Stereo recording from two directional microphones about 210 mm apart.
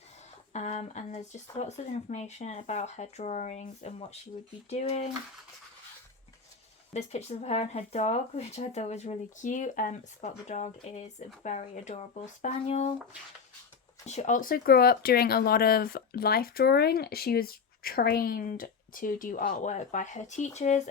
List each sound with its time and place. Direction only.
0.5 s speech: 30° left (ahead or behind)
6.9 s speech: 30° left (ahead or behind)
14.0 s speech: 35° left (ahead or behind)